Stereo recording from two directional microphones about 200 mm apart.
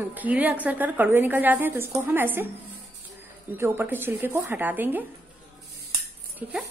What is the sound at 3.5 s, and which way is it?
A woman's voice, 10° right (ahead or behind).